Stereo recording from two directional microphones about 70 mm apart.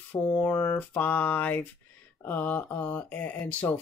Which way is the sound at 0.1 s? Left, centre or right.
Left.